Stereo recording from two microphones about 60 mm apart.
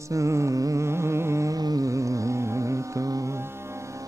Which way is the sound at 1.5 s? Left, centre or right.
Right.